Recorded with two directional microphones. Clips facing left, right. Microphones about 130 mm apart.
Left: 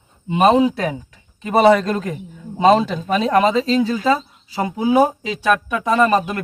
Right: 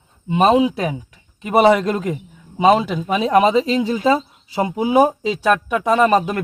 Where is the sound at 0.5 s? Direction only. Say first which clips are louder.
Even; 15° right (ahead or behind).